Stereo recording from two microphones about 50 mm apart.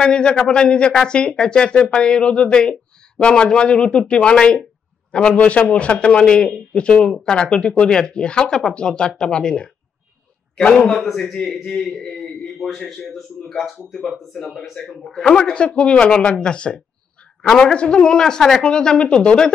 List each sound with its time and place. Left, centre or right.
0.0 s a man's voice: centre
10.9 s a man's voice: centre
11.1 s a man's voice: centre